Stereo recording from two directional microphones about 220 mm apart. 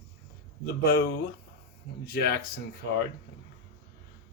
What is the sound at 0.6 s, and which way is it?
Speech, 45° left (ahead or behind).